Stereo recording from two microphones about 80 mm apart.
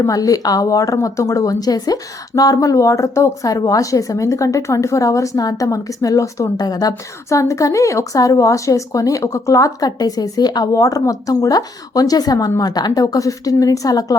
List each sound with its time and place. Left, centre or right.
0.0 s a woman's voice: left